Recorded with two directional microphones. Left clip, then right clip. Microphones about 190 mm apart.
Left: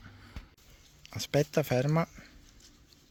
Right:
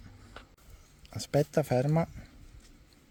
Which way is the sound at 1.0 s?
10° right (ahead or behind).